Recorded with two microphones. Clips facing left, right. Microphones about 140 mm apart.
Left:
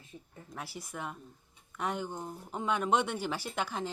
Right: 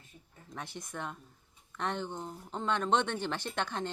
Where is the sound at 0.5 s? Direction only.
5° left (ahead or behind).